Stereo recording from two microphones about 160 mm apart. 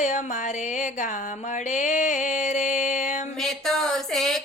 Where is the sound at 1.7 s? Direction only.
50° left (ahead or behind).